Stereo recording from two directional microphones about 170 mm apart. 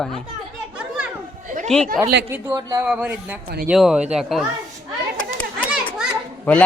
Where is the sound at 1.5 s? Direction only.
50° right (ahead or behind).